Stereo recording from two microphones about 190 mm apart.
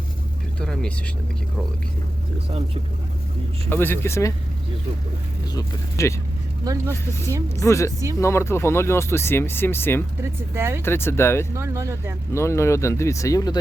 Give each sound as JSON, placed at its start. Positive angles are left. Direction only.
{"t": 0.6, "sound": "vehicle", "side_deg": 5}
{"t": 3.7, "sound": "speech", "side_deg": 10}
{"t": 5.5, "sound": "speech", "side_deg": 15}
{"t": 10.5, "sound": "speech", "side_deg": -15}
{"t": 10.8, "sound": "speech", "side_deg": 10}
{"t": 11.5, "sound": "speech", "side_deg": -15}
{"t": 12.3, "sound": "speech", "side_deg": 15}